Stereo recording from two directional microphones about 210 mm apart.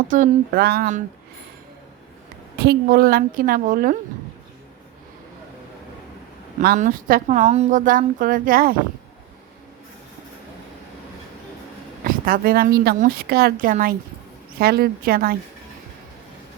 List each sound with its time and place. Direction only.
0.1 s speech: 40° right (ahead or behind)
2.6 s a woman's voice: 45° right (ahead or behind)
6.6 s speech: 40° right (ahead or behind)
12.0 s a woman's voice: 45° right (ahead or behind)